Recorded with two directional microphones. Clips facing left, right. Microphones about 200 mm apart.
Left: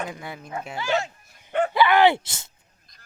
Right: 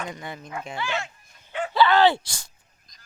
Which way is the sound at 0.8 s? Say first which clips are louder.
Left 6 dB; 40° left (ahead or behind).